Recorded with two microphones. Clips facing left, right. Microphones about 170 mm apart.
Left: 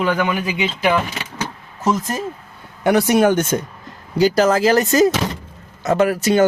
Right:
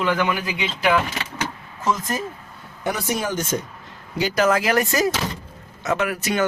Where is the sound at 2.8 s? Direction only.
70° left (ahead or behind).